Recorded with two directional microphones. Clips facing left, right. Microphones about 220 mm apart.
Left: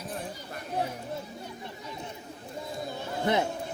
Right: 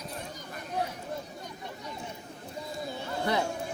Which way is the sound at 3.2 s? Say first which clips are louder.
Left 3 dB; 20° left (ahead or behind).